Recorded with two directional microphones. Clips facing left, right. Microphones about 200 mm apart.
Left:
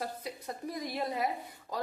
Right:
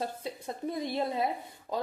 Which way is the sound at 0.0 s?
25° right (ahead or behind).